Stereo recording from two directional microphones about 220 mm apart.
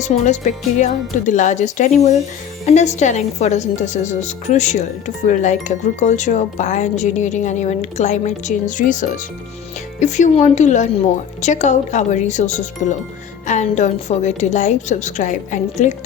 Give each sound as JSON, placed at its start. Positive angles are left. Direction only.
{"t": 0.0, "sound": "a woman's voice", "side_deg": 30}